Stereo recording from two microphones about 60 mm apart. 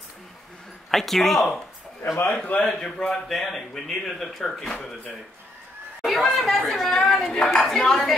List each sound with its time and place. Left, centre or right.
0.9 s a man's voice: centre
2.3 s a man's voice: left
2.6 s a man's voice: centre
6.0 s speech: centre